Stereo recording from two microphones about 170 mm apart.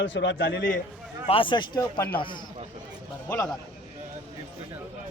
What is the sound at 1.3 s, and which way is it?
Speech, 30° left (ahead or behind).